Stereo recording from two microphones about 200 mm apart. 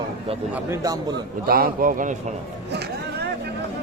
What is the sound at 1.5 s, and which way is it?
Speech, 45° right (ahead or behind).